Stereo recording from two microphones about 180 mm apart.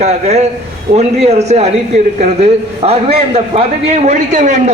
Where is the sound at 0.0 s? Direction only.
35° right (ahead or behind).